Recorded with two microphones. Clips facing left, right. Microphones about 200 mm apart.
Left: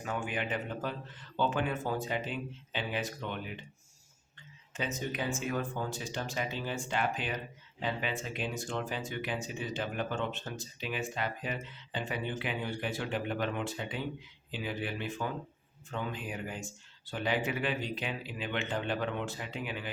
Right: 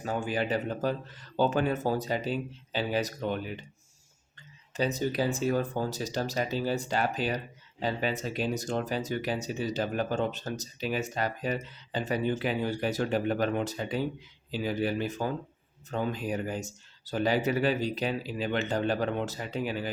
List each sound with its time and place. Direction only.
0.0 s speech: 35° right (ahead or behind)
4.7 s speech: 35° right (ahead or behind)